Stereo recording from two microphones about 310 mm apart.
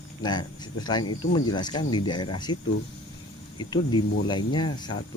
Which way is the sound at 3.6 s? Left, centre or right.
Centre.